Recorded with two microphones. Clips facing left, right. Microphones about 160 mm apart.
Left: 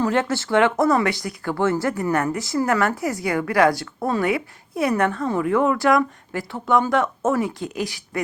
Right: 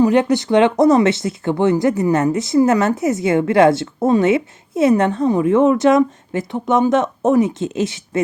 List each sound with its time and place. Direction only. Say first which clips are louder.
0.0 s speech: right 7 dB; 15° right (ahead or behind)